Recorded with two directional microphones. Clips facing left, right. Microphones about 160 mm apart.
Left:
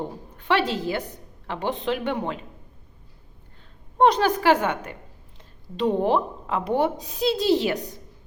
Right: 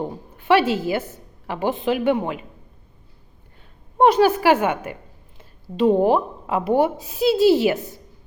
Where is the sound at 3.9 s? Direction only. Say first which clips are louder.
Right 4 dB; 10° right (ahead or behind).